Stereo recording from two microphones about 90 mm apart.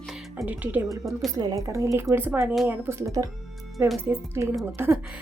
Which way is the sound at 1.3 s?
45° right (ahead or behind).